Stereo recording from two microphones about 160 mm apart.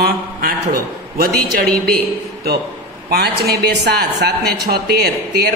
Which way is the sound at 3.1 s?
80° right.